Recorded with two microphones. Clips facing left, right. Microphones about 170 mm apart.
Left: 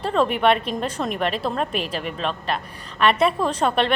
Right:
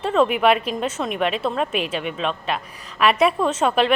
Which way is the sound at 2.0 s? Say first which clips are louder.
Right 2 dB; centre (ahead or behind).